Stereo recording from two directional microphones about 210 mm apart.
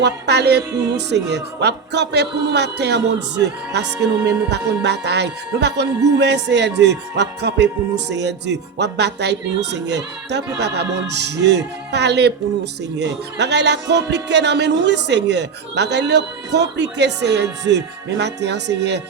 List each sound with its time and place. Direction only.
0.0 s a man's voice: 50° right (ahead or behind)